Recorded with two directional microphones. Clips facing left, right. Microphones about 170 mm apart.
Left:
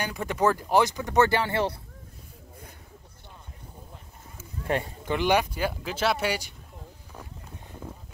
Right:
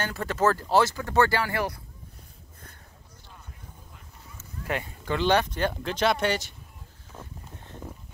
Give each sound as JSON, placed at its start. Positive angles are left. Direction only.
{"t": 0.0, "sound": "speech", "side_deg": 15}
{"t": 5.0, "sound": "speech", "side_deg": 15}
{"t": 7.1, "sound": "boat", "side_deg": 10}